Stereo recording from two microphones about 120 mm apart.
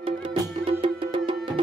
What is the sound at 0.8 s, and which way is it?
Music, 45° right (ahead or behind).